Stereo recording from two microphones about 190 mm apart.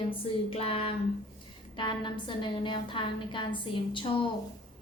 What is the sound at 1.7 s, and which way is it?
A woman's voice, 25° left (ahead or behind).